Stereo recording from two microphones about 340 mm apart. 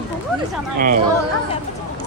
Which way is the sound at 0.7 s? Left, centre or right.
Right.